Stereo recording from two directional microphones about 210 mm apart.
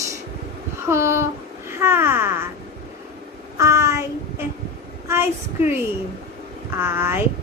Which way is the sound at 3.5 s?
15° right (ahead or behind).